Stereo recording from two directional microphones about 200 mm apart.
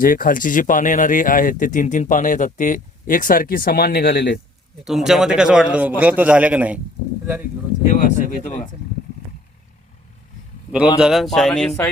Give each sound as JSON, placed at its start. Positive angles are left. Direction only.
{"t": 0.0, "sound": "speech", "side_deg": 45}
{"t": 4.9, "sound": "a man's voice", "side_deg": 0}
{"t": 7.9, "sound": "speech", "side_deg": 40}
{"t": 11.0, "sound": "speech", "side_deg": 0}